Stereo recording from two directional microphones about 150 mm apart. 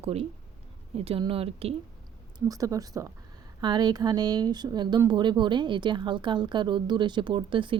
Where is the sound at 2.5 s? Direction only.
25° right (ahead or behind).